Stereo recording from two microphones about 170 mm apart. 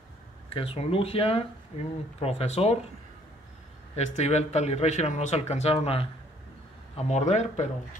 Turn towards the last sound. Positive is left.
turn(degrees=45)  # may be behind; listen again after turning